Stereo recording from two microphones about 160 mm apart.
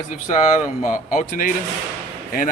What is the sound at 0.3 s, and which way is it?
Speech, 45° left (ahead or behind).